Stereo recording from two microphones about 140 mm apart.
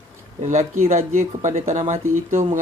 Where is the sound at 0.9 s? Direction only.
50° right (ahead or behind).